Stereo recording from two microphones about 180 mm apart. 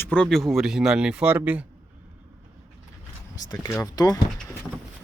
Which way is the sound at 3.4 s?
15° left (ahead or behind).